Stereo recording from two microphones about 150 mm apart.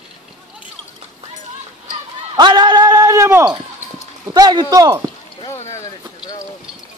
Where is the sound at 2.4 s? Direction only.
30° right (ahead or behind).